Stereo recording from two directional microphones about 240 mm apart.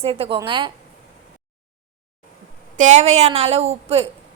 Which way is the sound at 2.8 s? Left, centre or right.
Right.